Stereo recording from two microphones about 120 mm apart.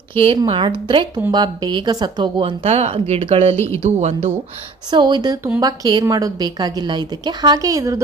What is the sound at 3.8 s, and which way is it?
Speech, 70° right (ahead or behind).